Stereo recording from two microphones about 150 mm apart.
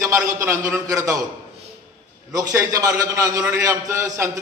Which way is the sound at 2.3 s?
25° right (ahead or behind).